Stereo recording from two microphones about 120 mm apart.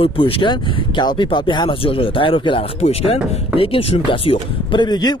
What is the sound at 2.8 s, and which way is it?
Speech, 65° left (ahead or behind).